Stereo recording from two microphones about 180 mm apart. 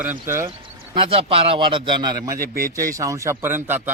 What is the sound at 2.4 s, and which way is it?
Speech, 55° right (ahead or behind).